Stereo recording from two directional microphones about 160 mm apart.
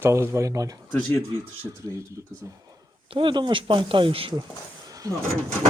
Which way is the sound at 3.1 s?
30° right (ahead or behind).